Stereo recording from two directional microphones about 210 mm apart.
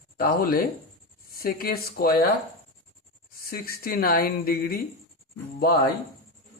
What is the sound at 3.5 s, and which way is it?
Speech, 45° left (ahead or behind).